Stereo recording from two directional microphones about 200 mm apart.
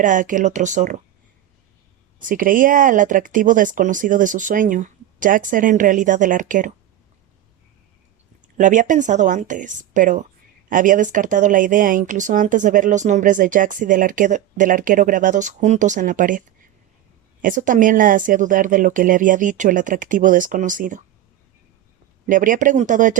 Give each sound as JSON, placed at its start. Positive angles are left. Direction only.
{"t": 0.0, "sound": "speech", "side_deg": -40}
{"t": 2.1, "sound": "speech", "side_deg": -45}
{"t": 8.5, "sound": "speech", "side_deg": -40}
{"t": 17.4, "sound": "speech", "side_deg": -40}
{"t": 22.3, "sound": "speech", "side_deg": -40}